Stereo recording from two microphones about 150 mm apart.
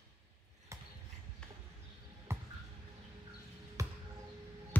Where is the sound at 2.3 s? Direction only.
15° right (ahead or behind).